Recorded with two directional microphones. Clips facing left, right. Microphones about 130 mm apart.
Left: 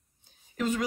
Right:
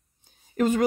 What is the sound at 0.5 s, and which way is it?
Speech, 50° right (ahead or behind).